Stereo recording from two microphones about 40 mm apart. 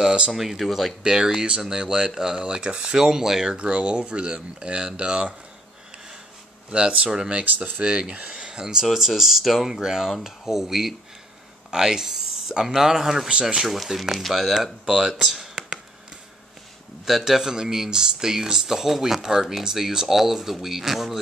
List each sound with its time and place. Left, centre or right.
0.3 s speech: centre
1.0 s speech: centre
3.5 s speech: right
6.7 s speech: right
7.4 s speech: right
7.8 s speech: right
8.8 s speech: centre
9.8 s speech: centre
13.3 s speech: right
13.6 s speech: centre
14.9 s speech: centre
17.0 s speech: centre